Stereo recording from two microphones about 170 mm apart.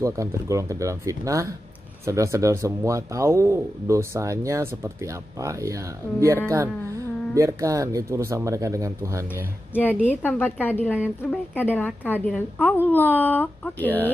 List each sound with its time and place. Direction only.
0.0 s speech: 20° right (ahead or behind)
10.2 s a woman's voice: 10° left (ahead or behind)